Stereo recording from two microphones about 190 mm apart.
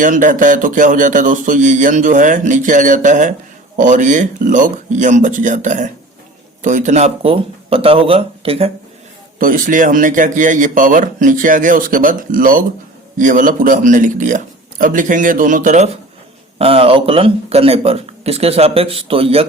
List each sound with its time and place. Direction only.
0.0 s speech: 45° right (ahead or behind)
9.4 s speech: 45° right (ahead or behind)
16.6 s speech: 30° right (ahead or behind)